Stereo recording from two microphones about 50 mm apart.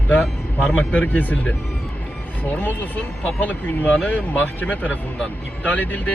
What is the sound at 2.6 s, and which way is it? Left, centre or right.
Speech, left.